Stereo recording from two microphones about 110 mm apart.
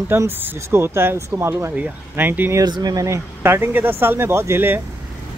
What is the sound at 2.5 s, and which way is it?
Speech, 35° right (ahead or behind).